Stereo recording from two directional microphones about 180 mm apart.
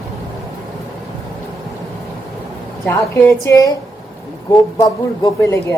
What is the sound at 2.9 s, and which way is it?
Speech, 15° left (ahead or behind).